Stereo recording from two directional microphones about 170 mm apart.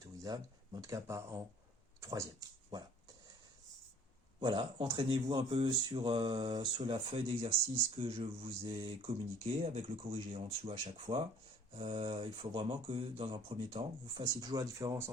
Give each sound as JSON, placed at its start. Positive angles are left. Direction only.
{"t": 0.0, "sound": "speech", "side_deg": -20}
{"t": 4.4, "sound": "speech", "side_deg": -30}